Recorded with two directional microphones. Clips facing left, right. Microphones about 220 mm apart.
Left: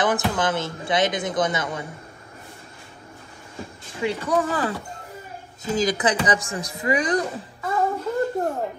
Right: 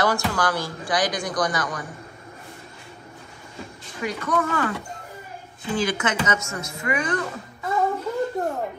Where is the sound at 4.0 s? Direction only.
30° left (ahead or behind).